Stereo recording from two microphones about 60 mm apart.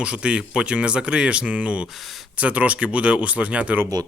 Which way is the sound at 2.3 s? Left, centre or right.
Right.